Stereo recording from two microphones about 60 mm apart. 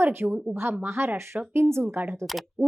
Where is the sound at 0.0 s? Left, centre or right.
Right.